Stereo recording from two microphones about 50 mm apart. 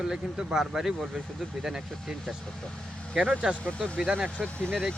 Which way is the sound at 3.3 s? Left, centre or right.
Right.